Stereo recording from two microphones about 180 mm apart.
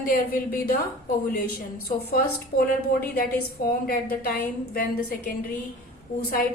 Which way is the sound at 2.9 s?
60° left (ahead or behind).